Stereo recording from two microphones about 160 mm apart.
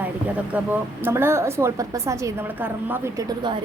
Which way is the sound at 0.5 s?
10° right (ahead or behind).